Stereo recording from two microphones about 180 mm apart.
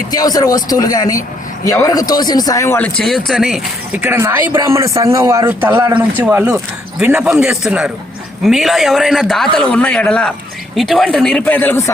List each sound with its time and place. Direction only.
0.1 s speech: 20° left (ahead or behind)